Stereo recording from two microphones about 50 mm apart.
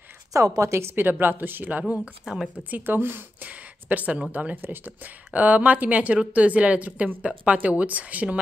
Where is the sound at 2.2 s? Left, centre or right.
Centre.